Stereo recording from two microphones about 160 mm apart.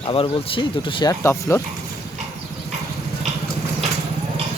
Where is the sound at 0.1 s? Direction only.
35° left (ahead or behind).